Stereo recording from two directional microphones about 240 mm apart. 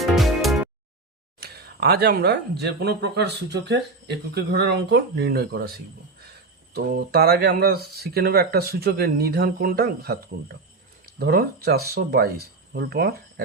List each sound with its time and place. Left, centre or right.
0.0 s music: centre
1.4 s speech: right
6.7 s speech: right